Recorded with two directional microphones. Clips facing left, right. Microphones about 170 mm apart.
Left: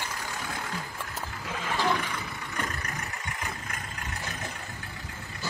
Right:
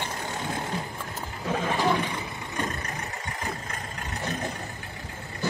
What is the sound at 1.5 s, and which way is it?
Roar, 50° right (ahead or behind).